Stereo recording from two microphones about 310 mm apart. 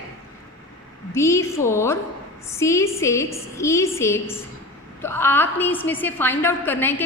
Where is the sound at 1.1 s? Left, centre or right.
Centre.